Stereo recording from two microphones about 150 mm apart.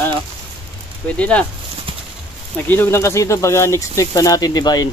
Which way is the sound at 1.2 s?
10° left (ahead or behind).